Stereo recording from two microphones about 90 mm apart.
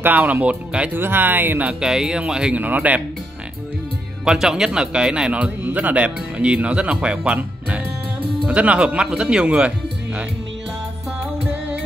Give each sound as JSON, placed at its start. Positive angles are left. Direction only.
{"t": 0.0, "sound": "speech", "side_deg": -20}
{"t": 1.7, "sound": "a man's voice", "side_deg": -5}
{"t": 2.6, "sound": "speech", "side_deg": -20}
{"t": 4.2, "sound": "a man's voice", "side_deg": -5}